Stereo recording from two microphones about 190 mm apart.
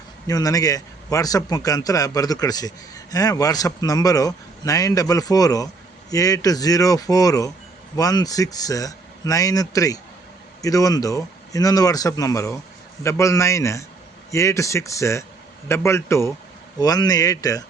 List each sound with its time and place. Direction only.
0.3 s a man's voice: 20° left (ahead or behind)